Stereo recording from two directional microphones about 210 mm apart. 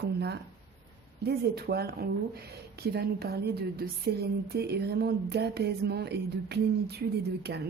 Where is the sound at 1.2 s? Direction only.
50° right (ahead or behind).